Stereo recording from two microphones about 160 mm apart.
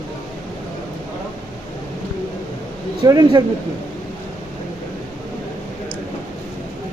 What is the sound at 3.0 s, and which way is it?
Speech, 25° right (ahead or behind).